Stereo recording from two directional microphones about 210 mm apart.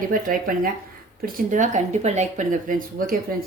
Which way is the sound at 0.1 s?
40° right (ahead or behind).